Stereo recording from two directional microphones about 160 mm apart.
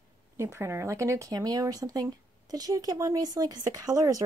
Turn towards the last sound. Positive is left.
turn(degrees=-20)  # may be behind; listen again after turning